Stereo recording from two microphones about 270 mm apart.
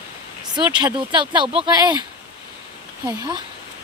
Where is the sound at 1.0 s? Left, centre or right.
Centre.